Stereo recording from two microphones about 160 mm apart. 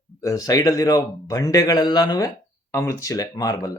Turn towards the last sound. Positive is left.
turn(degrees=20)  # may be behind; listen again after turning